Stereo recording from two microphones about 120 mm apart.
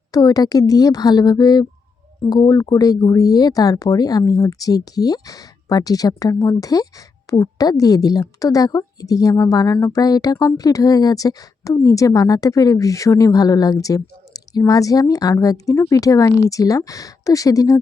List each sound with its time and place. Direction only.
0.1 s a woman's voice: 30° left (ahead or behind)